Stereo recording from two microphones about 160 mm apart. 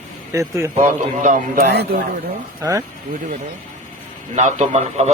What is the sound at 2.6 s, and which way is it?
Speech, 20° right (ahead or behind).